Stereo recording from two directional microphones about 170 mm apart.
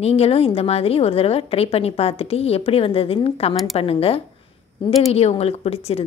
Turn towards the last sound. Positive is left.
turn(degrees=35)  # may be behind; listen again after turning